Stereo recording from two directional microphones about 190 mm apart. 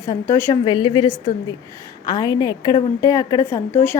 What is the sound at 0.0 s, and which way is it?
Speech, 15° left (ahead or behind).